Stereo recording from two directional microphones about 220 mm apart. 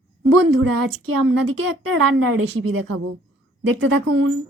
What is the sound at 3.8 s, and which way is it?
Speech, 65° right (ahead or behind).